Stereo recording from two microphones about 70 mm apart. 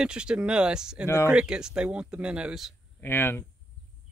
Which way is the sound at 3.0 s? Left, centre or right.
Left.